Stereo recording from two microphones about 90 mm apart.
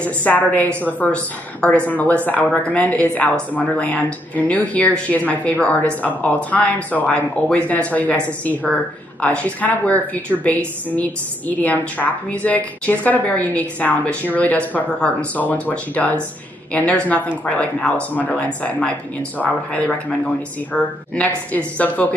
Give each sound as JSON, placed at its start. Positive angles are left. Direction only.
{"t": 0.0, "sound": "a woman's voice", "side_deg": 20}
{"t": 21.5, "sound": "a woman's voice", "side_deg": 15}